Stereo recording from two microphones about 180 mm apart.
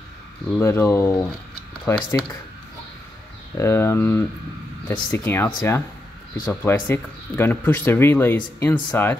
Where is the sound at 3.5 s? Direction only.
15° left (ahead or behind).